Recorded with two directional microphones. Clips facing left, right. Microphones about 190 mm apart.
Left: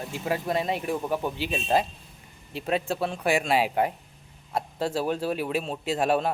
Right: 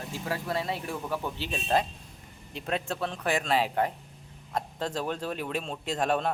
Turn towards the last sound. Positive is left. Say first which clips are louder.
# left 3 dB
turn(degrees=5)  # may be behind; listen again after turning